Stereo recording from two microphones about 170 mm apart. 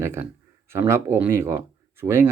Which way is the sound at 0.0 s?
15° right (ahead or behind).